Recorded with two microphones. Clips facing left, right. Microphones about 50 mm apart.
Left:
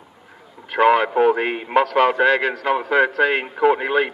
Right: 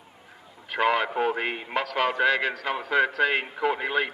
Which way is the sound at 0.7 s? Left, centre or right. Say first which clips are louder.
Left 8 dB; centre.